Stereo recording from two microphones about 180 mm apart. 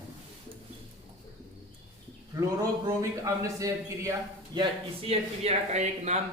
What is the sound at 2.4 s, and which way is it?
A man's voice, 20° right (ahead or behind).